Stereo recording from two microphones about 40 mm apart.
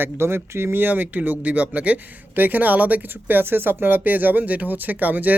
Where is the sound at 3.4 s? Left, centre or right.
Right.